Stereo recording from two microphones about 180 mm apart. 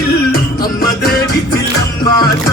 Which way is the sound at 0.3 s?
55° left (ahead or behind).